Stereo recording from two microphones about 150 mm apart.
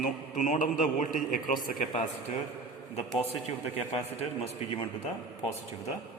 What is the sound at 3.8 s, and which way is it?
A man's voice, 45° left (ahead or behind).